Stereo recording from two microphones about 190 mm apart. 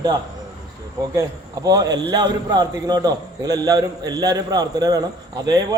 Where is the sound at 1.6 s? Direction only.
20° right (ahead or behind).